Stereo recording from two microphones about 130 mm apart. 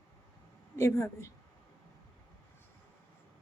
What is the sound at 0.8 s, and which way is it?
Speech, 20° left (ahead or behind).